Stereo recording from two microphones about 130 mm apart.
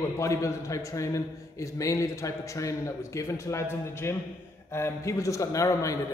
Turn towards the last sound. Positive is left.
turn(degrees=25)  # may be behind; listen again after turning